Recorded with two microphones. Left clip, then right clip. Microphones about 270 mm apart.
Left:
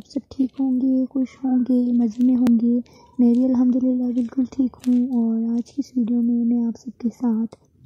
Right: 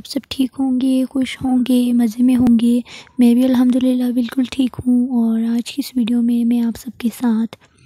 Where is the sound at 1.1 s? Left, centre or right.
Right.